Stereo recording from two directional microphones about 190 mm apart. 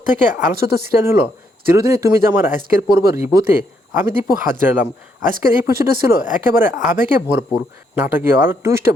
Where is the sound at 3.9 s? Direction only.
10° right (ahead or behind).